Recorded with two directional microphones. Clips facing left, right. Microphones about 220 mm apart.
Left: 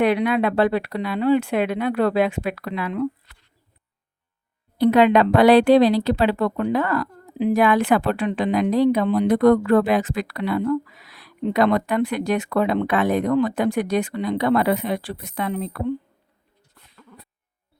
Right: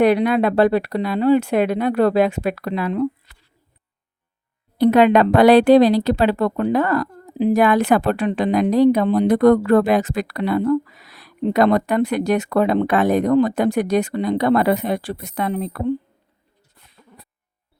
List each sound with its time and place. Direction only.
0.0 s speech: 40° right (ahead or behind)
4.8 s speech: 45° right (ahead or behind)